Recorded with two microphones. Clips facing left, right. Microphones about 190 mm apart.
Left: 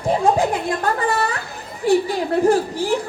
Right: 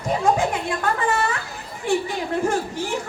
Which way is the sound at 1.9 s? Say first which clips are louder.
Left 6 dB; 35° left (ahead or behind).